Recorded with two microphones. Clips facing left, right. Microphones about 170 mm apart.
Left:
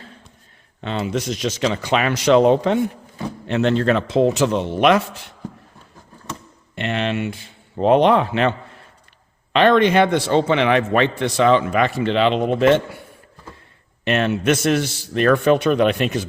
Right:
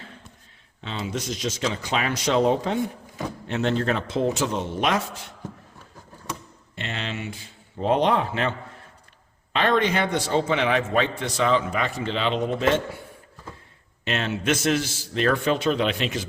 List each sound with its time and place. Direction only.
0.8 s speech: 60° left (ahead or behind)
6.7 s a man's voice: 65° left (ahead or behind)
14.0 s a man's voice: 60° left (ahead or behind)